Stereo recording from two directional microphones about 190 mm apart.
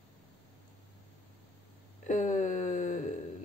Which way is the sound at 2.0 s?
40° left (ahead or behind).